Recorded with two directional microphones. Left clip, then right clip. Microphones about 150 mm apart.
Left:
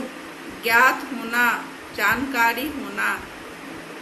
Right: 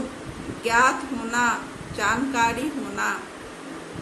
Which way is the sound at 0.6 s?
15° right (ahead or behind).